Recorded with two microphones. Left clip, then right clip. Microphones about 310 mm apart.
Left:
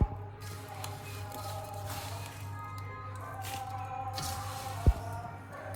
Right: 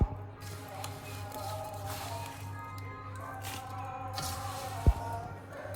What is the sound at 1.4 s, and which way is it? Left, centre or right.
Music, centre.